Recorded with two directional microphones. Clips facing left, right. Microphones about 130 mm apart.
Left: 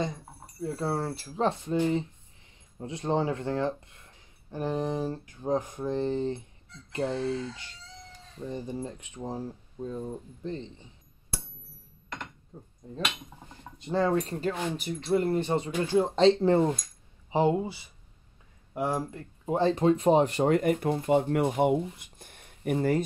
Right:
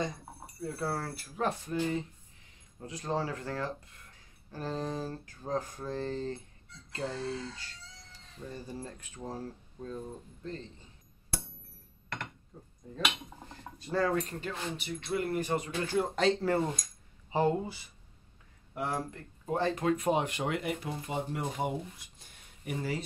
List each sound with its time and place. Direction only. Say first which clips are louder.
0.7 s speech: left 5 dB; 25° left (ahead or behind)
12.5 s speech: left 4 dB; 20° left (ahead or behind)
13.7 s speech: left 4 dB; 20° left (ahead or behind)
14.4 s speech: left 7 dB; 40° left (ahead or behind); by 17.6 s 20° left (ahead or behind)
18.7 s speech: left 5 dB; 25° left (ahead or behind)
19.6 s speech: left 7 dB; 30° left (ahead or behind); by 23.0 s 50° left (ahead or behind)